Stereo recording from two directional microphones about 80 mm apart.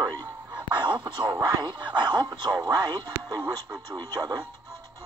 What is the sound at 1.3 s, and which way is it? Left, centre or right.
Speech, right.